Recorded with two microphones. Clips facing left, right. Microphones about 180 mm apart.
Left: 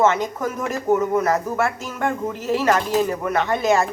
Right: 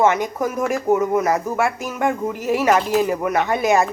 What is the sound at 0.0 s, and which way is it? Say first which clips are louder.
A woman's voice: right 1 dB; 15° right (ahead or behind).